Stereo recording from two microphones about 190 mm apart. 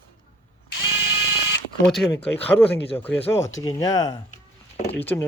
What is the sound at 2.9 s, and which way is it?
Speech, 10° left (ahead or behind).